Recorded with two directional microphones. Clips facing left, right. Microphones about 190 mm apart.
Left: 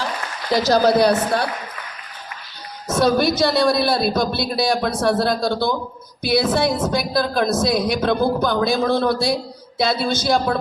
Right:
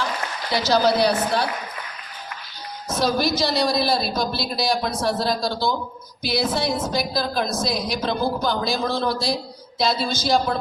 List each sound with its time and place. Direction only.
0.5 s a woman's voice: 45° left (ahead or behind)
2.9 s a woman's voice: 55° left (ahead or behind)